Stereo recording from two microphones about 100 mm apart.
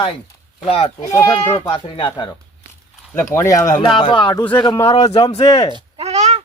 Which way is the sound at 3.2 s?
30° left (ahead or behind).